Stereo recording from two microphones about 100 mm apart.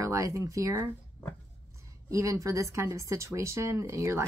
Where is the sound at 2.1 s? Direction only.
30° right (ahead or behind).